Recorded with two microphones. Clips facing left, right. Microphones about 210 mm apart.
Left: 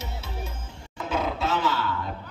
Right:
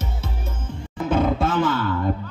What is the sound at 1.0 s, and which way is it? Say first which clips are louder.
Roar: right 7 dB; 50° right (ahead or behind).